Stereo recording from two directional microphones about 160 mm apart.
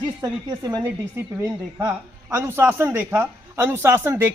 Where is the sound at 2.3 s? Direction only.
15° right (ahead or behind).